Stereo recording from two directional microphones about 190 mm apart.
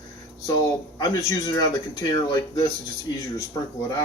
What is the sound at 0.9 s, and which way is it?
Speech, 20° left (ahead or behind).